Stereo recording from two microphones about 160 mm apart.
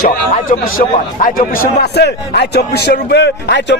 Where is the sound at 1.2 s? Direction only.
75° left (ahead or behind).